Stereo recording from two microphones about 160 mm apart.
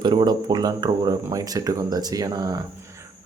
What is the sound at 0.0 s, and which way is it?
Speech, 25° right (ahead or behind).